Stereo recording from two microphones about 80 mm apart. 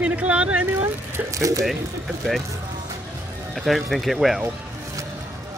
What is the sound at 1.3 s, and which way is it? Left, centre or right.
Speech, right.